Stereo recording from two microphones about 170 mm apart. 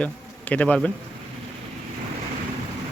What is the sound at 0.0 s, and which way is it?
Speech, 10° left (ahead or behind).